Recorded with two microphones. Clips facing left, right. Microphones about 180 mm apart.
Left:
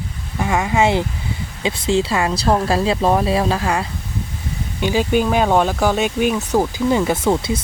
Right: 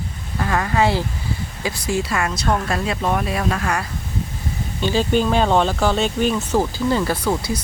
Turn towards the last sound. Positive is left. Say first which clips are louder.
# left 4 dB
turn(degrees=25)  # may be behind; listen again after turning